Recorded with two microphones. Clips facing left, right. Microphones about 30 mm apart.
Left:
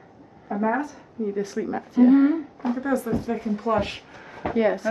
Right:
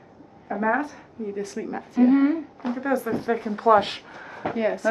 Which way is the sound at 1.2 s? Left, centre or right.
Centre.